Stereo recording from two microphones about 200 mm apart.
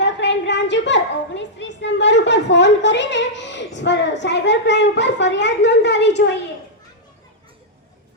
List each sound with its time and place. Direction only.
0.0 s a child's voice: 60° left (ahead or behind)